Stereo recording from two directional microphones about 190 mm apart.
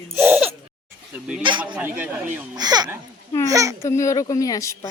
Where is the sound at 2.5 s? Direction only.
20° right (ahead or behind).